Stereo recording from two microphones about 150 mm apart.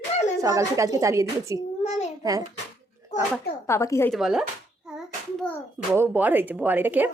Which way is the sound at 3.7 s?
20° left (ahead or behind).